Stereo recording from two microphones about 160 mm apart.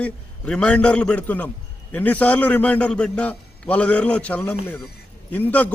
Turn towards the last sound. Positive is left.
turn(degrees=10)  # may be behind; listen again after turning